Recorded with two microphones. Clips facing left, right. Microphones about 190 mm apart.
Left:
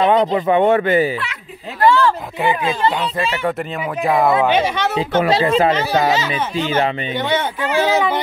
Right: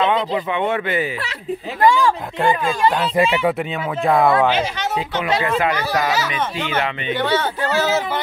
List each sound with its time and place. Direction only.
0.0 s speech: 40° left (ahead or behind)
1.9 s speech: 10° right (ahead or behind)
4.0 s speech: centre (ahead or behind)
4.6 s speech: 60° left (ahead or behind)
5.2 s speech: 35° left (ahead or behind)
7.2 s speech: 20° left (ahead or behind)